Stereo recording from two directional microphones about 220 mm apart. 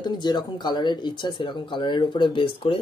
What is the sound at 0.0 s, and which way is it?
Speech, 20° left (ahead or behind).